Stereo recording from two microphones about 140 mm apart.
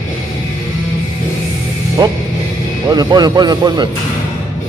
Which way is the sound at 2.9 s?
30° right (ahead or behind).